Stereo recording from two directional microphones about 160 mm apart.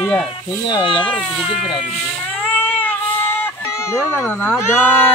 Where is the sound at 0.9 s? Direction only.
30° left (ahead or behind).